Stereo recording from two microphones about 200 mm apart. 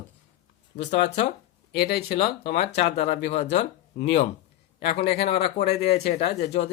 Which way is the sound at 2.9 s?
35° left (ahead or behind).